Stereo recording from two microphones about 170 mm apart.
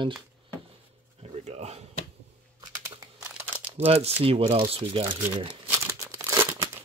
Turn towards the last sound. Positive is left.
turn(degrees=-15)  # may be behind; listen again after turning